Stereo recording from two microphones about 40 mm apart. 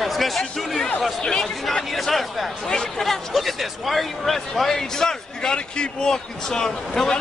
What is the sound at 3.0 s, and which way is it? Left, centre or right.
Speech, centre.